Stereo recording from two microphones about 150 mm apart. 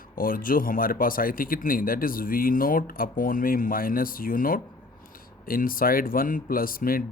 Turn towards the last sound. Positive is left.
turn(degrees=70)  # may be behind; listen again after turning